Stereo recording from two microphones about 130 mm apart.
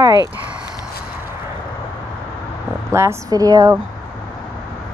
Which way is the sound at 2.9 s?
20° right (ahead or behind).